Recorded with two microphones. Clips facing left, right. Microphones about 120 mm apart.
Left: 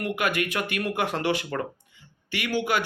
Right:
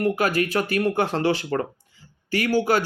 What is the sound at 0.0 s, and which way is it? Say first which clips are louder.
A man's voice: right 5 dB; 35° right (ahead or behind).